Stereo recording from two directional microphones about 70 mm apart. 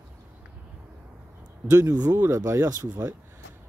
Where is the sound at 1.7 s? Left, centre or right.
Right.